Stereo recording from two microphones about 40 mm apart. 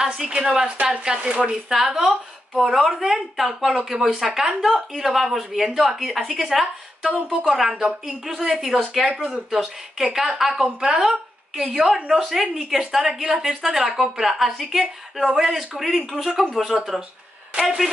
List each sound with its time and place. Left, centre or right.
0.0 s a woman's voice: centre
1.2 s speech: right
1.5 s a woman's voice: centre
7.0 s a woman's voice: centre
9.2 s a woman's voice: centre